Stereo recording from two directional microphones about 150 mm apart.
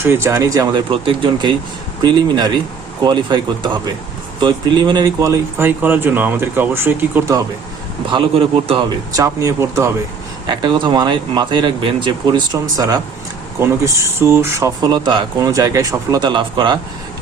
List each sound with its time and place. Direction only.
0.0 s speech: 15° right (ahead or behind)
0.9 s speech: 35° right (ahead or behind); by 7.4 s 15° right (ahead or behind)
8.1 s speech: 40° right (ahead or behind)
9.1 s speech: 20° right (ahead or behind)
10.4 s speech: 30° right (ahead or behind)
14.8 s speech: 25° right (ahead or behind)